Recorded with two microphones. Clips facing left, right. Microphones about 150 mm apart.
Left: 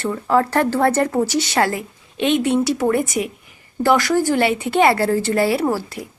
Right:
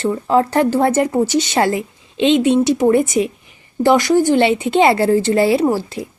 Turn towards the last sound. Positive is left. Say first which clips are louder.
# right 4 dB
turn(degrees=-25)  # may be behind; listen again after turning